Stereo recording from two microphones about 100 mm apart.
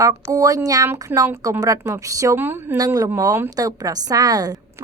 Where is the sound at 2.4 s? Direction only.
20° right (ahead or behind).